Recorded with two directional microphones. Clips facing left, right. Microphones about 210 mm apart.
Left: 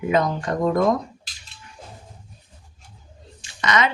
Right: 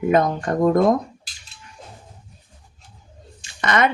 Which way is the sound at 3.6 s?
55° right (ahead or behind).